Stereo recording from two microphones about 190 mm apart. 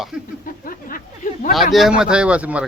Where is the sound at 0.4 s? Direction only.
45° left (ahead or behind).